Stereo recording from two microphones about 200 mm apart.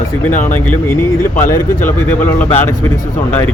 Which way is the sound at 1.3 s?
40° left (ahead or behind).